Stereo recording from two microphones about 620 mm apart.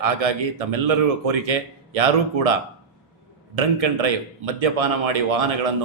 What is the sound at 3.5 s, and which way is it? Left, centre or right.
A man's voice, right.